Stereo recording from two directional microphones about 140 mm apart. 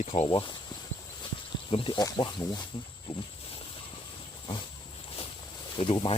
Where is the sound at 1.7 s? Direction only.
40° left (ahead or behind).